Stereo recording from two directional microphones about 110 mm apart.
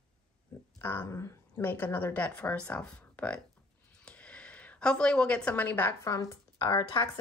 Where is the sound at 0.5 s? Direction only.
25° left (ahead or behind).